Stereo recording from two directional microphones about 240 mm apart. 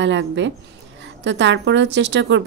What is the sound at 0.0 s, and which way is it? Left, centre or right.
Speech, right.